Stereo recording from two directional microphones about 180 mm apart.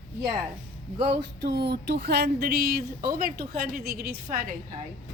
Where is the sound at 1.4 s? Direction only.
65° right (ahead or behind).